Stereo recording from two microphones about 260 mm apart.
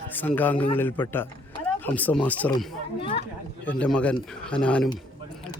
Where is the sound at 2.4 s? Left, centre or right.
Centre.